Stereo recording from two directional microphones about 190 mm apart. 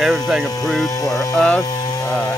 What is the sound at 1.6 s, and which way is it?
Cattle, 20° left (ahead or behind).